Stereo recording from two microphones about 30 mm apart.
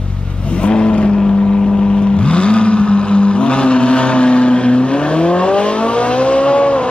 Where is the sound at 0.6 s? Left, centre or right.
Left.